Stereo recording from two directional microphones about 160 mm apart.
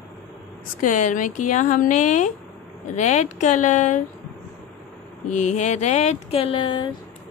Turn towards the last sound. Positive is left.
turn(degrees=30)  # may be behind; listen again after turning